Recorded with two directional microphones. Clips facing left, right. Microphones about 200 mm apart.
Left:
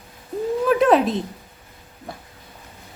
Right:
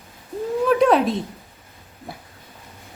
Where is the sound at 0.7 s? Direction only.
Centre (ahead or behind).